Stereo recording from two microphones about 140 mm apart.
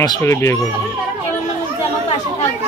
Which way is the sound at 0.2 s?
20° left (ahead or behind).